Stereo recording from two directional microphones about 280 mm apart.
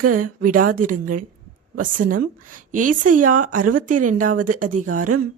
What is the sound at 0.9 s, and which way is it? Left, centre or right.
Speech, right.